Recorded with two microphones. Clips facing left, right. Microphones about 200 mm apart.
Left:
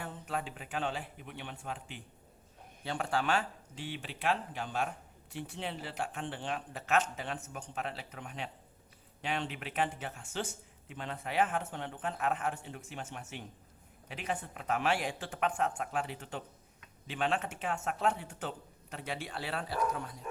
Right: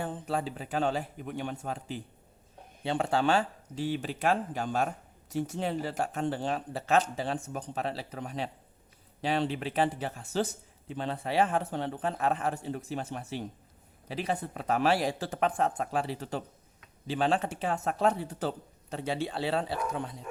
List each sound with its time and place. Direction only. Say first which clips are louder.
0.0 s speech: right 6 dB; 30° right (ahead or behind)
2.8 s speech: right 6 dB; 25° right (ahead or behind)